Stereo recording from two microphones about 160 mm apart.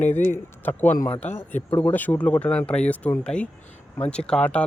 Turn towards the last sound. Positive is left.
turn(degrees=5)  # may be behind; listen again after turning